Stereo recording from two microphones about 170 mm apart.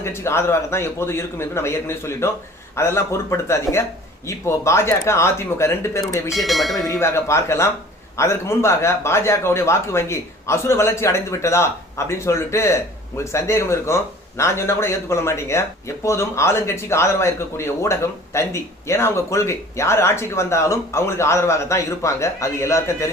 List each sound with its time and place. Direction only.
0.0 s a man's voice: 15° left (ahead or behind)
6.3 s speech: centre (ahead or behind)
7.0 s a man's voice: 15° left (ahead or behind)